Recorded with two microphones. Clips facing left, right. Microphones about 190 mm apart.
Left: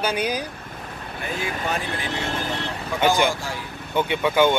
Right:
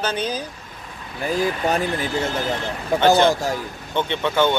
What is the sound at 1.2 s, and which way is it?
Speech, 40° right (ahead or behind).